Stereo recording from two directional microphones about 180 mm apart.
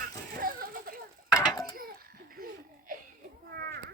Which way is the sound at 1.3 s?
20° left (ahead or behind).